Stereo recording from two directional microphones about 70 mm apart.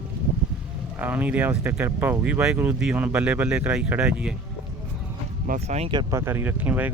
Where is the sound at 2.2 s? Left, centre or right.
Centre.